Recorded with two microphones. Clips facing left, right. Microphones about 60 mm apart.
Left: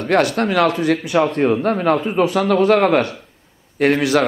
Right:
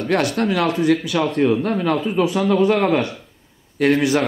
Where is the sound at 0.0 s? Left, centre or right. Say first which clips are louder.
Left 3 dB; left.